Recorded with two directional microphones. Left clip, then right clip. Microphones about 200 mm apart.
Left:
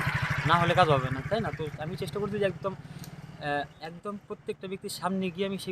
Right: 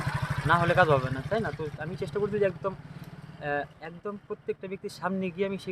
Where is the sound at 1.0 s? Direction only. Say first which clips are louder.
Even; 25° right (ahead or behind).